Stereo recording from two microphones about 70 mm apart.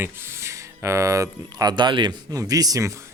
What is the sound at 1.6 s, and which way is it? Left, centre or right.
Speech, right.